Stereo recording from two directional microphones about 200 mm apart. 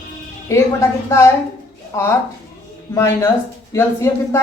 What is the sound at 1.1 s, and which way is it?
Speech, 15° left (ahead or behind).